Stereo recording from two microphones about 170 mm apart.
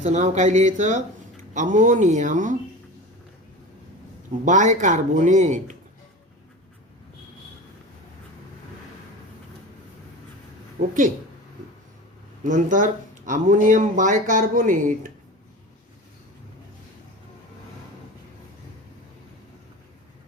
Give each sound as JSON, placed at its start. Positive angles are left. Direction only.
{"t": 0.0, "sound": "speech", "side_deg": -45}
{"t": 4.4, "sound": "speech", "side_deg": -45}
{"t": 10.8, "sound": "speech", "side_deg": -50}
{"t": 12.4, "sound": "speech", "side_deg": -50}